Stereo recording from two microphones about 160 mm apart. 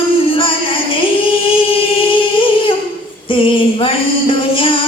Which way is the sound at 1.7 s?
35° left (ahead or behind).